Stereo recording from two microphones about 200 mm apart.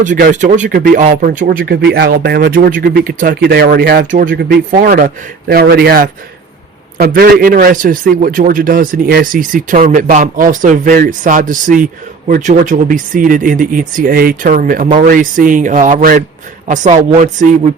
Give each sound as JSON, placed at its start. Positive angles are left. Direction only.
{"t": 0.0, "sound": "a man's voice", "side_deg": -40}